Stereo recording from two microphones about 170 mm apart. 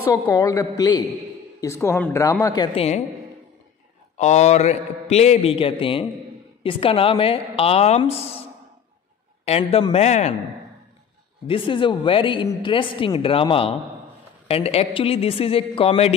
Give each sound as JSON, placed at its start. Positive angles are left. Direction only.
{"t": 0.0, "sound": "a woman's voice", "side_deg": 20}
{"t": 4.2, "sound": "a man's voice", "side_deg": 40}
{"t": 9.4, "sound": "a man's voice", "side_deg": 35}
{"t": 11.4, "sound": "a man's voice", "side_deg": 30}